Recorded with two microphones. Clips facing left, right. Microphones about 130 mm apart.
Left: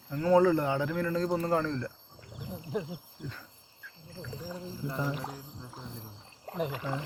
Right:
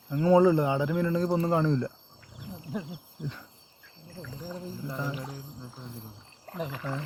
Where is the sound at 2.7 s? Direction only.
5° right (ahead or behind).